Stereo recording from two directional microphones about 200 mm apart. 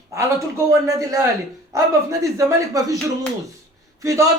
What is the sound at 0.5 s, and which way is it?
A man's voice, 15° right (ahead or behind).